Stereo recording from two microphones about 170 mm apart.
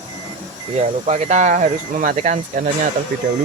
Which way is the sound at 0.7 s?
40° right (ahead or behind).